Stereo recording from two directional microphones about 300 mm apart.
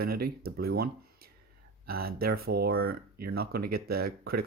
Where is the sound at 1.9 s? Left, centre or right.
Right.